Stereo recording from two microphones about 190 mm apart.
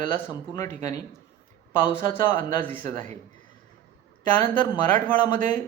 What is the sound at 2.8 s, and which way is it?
Speech, 45° right (ahead or behind).